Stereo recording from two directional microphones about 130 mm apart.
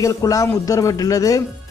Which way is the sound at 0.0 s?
25° left (ahead or behind).